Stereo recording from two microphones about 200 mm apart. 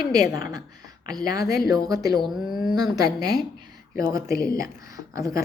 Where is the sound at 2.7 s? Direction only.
20° right (ahead or behind).